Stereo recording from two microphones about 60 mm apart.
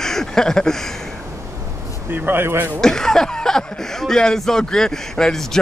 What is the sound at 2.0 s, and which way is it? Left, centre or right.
Speech, right.